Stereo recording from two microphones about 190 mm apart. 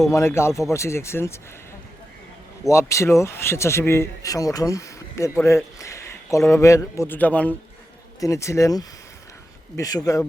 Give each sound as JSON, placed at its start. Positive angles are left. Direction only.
{"t": 0.1, "sound": "speech", "side_deg": 15}
{"t": 2.6, "sound": "speech", "side_deg": 15}